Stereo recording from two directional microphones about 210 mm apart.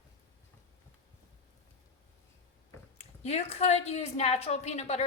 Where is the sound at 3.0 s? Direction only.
30° left (ahead or behind).